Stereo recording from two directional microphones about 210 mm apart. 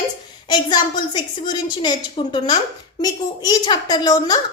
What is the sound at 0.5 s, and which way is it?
A woman's voice, 20° left (ahead or behind).